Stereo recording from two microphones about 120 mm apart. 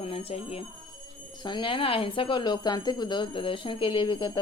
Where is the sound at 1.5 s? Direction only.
40° left (ahead or behind).